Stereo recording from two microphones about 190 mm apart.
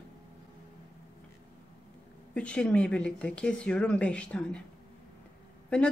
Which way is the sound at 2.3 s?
5° left (ahead or behind).